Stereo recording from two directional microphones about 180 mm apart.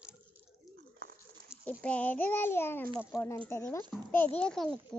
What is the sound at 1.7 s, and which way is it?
A child's voice, 5° left (ahead or behind).